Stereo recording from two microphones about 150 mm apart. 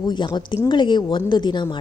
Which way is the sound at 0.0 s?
30° left (ahead or behind).